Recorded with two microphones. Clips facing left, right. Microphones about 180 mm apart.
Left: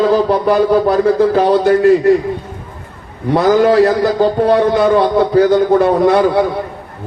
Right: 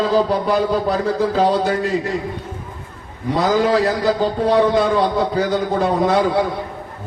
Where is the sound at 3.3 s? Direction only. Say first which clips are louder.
Left 6 dB; 60° left (ahead or behind).